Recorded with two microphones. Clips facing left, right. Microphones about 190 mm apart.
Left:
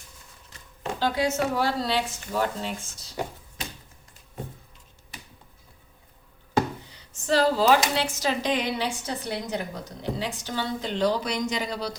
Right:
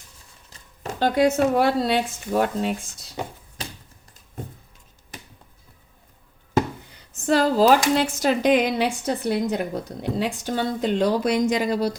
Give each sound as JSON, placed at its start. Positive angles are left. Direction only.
{"t": 0.9, "sound": "speech", "side_deg": -55}
{"t": 6.9, "sound": "speech", "side_deg": -50}